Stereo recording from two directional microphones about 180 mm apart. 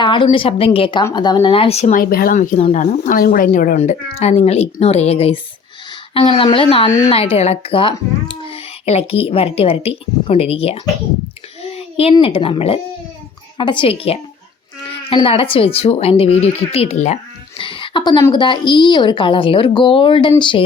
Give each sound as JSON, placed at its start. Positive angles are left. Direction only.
{"t": 0.0, "sound": "a woman's voice", "side_deg": 25}
{"t": 3.8, "sound": "a woman's voice", "side_deg": 35}
{"t": 17.6, "sound": "a sound", "side_deg": 30}
{"t": 18.2, "sound": "a woman's voice", "side_deg": 25}